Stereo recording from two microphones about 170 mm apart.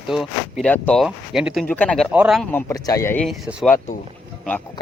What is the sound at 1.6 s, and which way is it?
Speech, 10° left (ahead or behind).